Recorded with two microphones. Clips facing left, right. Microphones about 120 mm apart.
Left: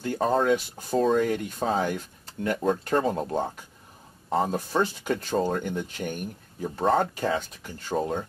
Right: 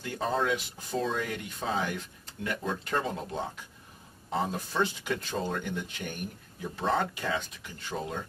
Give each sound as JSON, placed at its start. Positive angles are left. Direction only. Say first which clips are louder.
{"t": 0.0, "sound": "speech", "louder": "left 6 dB", "side_deg": 45}